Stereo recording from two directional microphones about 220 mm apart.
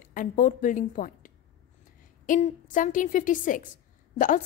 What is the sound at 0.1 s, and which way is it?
A woman's voice, 35° left (ahead or behind).